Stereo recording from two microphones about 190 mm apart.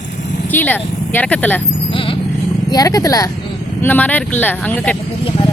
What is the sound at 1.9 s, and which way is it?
Vehicle, 25° left (ahead or behind).